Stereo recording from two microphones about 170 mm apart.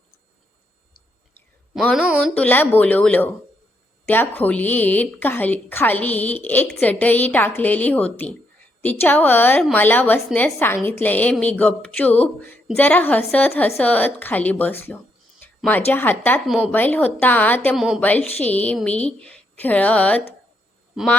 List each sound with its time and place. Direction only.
1.7 s speech: 5° left (ahead or behind)
2.0 s speech: 5° right (ahead or behind)
2.3 s a woman's voice: 10° left (ahead or behind)
15.4 s a sound: 10° left (ahead or behind)
15.9 s a woman's voice: 10° left (ahead or behind)
16.5 s speech: 5° right (ahead or behind)
16.7 s a woman's voice: 10° left (ahead or behind)
17.7 s speech: 5° right (ahead or behind)
18.0 s a woman's voice: 10° left (ahead or behind)